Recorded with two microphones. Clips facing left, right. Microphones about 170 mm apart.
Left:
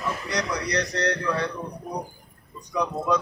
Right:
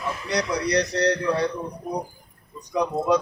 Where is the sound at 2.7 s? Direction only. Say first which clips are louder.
Right 3 dB; 30° right (ahead or behind).